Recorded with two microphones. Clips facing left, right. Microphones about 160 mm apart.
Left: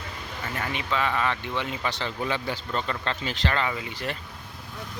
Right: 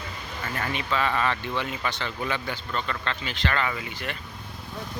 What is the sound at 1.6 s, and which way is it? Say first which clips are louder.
Speech: even; 30° left (ahead or behind).